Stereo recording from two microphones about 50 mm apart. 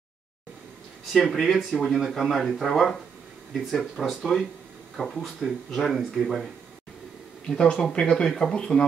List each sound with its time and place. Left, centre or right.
1.1 s speech: centre
7.4 s speech: centre